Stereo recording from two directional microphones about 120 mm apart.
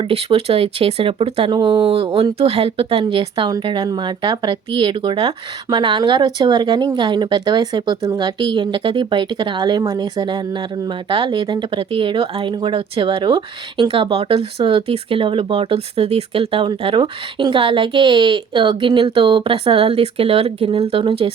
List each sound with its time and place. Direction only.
0.0 s speech: 50° right (ahead or behind)